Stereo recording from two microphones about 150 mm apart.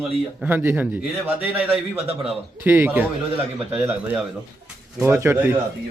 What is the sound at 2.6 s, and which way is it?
Speech, 15° right (ahead or behind).